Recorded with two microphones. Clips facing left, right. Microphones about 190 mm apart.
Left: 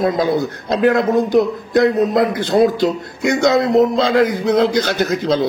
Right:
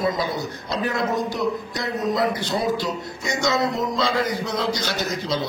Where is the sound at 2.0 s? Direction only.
55° left (ahead or behind).